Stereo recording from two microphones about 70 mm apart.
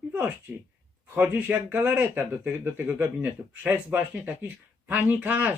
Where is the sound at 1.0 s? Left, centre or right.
Right.